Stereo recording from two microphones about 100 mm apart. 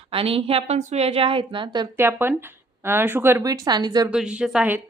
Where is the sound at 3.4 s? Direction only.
40° right (ahead or behind).